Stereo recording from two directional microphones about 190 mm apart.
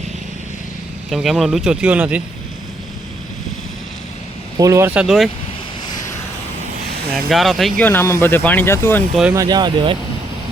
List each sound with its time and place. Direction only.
1.1 s speech: centre (ahead or behind)
4.5 s speech: 15° right (ahead or behind); by 5.3 s centre (ahead or behind)
7.3 s speech: centre (ahead or behind)
9.3 s speech: 20° right (ahead or behind)